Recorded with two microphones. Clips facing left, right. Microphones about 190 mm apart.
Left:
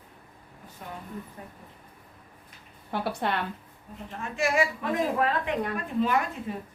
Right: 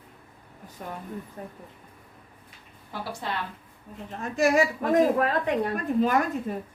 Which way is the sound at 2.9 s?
60° left (ahead or behind).